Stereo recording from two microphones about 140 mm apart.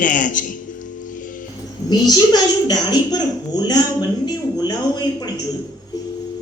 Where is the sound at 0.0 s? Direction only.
70° left (ahead or behind).